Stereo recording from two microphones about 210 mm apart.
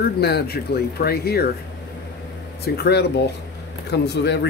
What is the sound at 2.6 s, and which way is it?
Speech, 50° left (ahead or behind).